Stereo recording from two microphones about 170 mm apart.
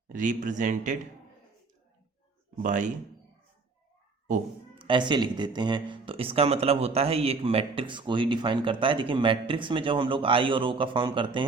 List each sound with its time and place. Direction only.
0.1 s a man's voice: 50° right (ahead or behind)
2.6 s a man's voice: 50° right (ahead or behind)
4.7 s speech: 30° right (ahead or behind)